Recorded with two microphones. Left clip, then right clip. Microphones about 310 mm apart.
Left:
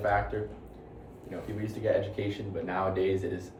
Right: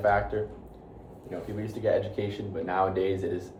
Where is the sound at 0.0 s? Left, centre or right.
Centre.